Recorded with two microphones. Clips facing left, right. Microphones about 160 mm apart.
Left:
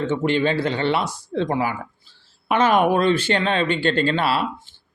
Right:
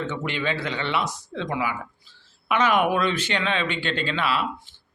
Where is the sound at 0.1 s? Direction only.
30° left (ahead or behind).